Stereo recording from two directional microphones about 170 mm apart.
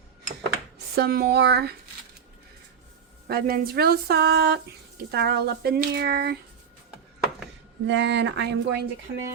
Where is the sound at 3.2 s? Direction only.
60° right (ahead or behind).